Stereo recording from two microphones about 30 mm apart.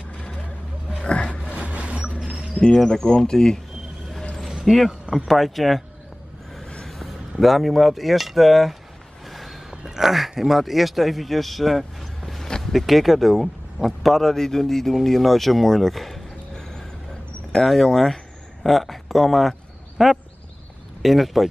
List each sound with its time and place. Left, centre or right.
1.0 s a sound: left
1.6 s vehicle: right
2.7 s speech: left
4.6 s speech: centre
6.9 s speech: centre
9.2 s a sound: centre
9.7 s a sound: centre
10.5 s speech: centre
12.7 s speech: centre
14.3 s speech: centre
16.5 s vehicle: left
17.5 s speech: centre